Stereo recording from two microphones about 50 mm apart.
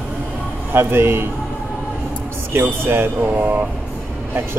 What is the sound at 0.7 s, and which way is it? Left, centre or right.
Speech, right.